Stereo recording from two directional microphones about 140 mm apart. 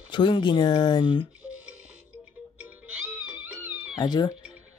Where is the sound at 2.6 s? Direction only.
10° right (ahead or behind).